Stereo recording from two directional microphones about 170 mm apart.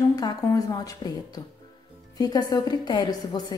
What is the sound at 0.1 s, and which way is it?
A woman's voice, 20° left (ahead or behind).